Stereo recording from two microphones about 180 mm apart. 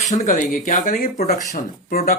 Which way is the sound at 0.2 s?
40° left (ahead or behind).